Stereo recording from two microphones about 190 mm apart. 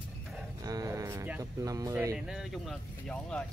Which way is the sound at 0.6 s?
20° right (ahead or behind).